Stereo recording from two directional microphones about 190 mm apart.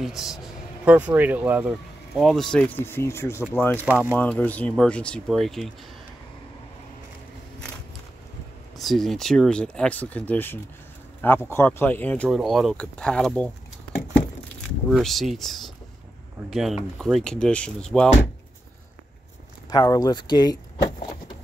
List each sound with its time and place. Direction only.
0.0 s speech: centre (ahead or behind)
3.8 s speech: 5° right (ahead or behind)
4.2 s speech: 10° left (ahead or behind)
8.7 s speech: centre (ahead or behind)
14.9 s speech: centre (ahead or behind)
19.7 s speech: 20° left (ahead or behind)